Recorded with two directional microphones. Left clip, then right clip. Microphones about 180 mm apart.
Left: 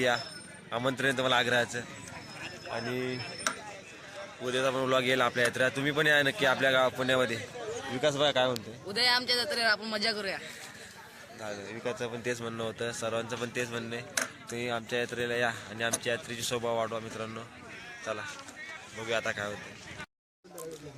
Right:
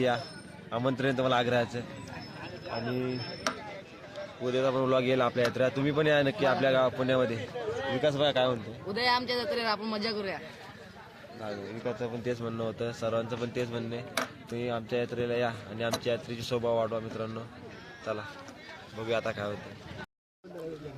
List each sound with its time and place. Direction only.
0.7 s a man's voice: centre (ahead or behind)
2.9 s speech: 10° left (ahead or behind)
4.4 s a man's voice: centre (ahead or behind)
8.0 s a man's voice: 25° left (ahead or behind)
8.9 s a man's voice: centre (ahead or behind)
11.4 s a man's voice: 15° left (ahead or behind)